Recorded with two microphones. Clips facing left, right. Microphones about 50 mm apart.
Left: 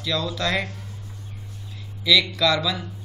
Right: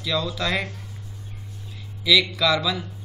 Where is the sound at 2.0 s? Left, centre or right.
Centre.